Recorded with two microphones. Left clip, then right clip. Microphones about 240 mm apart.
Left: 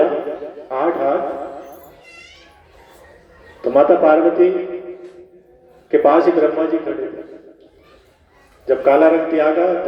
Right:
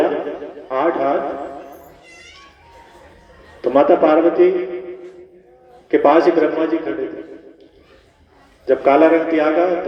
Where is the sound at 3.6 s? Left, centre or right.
Right.